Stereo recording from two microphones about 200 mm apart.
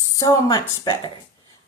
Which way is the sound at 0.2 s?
20° left (ahead or behind).